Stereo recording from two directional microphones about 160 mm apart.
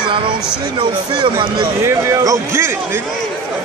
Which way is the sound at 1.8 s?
20° right (ahead or behind).